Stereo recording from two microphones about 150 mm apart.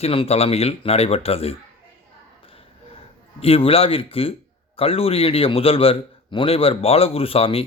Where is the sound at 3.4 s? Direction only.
40° left (ahead or behind).